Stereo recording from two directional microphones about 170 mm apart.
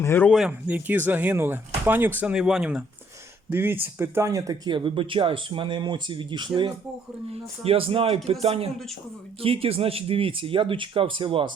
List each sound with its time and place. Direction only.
0.0 s speech: 10° left (ahead or behind)
0.3 s speech: 5° right (ahead or behind); by 11.5 s 30° right (ahead or behind)